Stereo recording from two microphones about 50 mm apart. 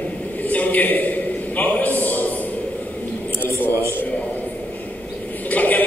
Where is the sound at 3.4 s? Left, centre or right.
Left.